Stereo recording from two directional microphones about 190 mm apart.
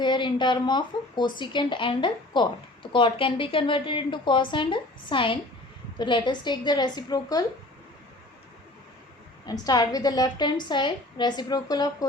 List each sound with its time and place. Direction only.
0.0 s speech: 25° left (ahead or behind)
9.5 s speech: 20° left (ahead or behind)